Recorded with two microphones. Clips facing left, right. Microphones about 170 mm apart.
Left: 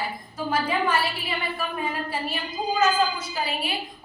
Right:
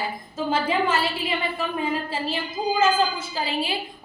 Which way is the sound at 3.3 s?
25° right (ahead or behind).